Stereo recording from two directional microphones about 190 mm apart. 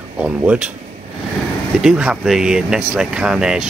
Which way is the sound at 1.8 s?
5° right (ahead or behind).